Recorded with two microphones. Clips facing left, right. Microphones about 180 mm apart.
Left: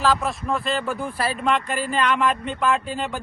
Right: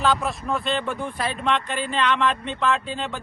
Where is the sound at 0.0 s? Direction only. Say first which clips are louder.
Left 1 dB; centre (ahead or behind).